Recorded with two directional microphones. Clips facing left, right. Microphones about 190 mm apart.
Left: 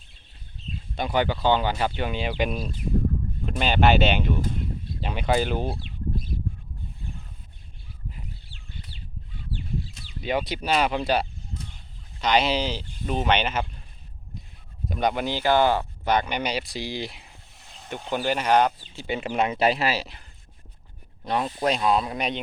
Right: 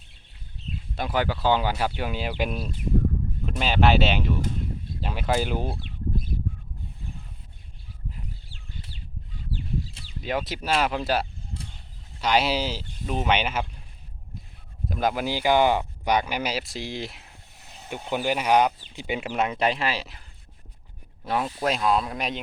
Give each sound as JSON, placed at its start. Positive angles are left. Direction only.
{"t": 0.9, "sound": "speech", "side_deg": -5}
{"t": 8.4, "sound": "a sound", "side_deg": -40}
{"t": 9.3, "sound": "chicken", "side_deg": -40}
{"t": 10.2, "sound": "speech", "side_deg": 0}
{"t": 14.8, "sound": "speech", "side_deg": 0}
{"t": 19.4, "sound": "speech", "side_deg": 5}
{"t": 21.2, "sound": "speech", "side_deg": -5}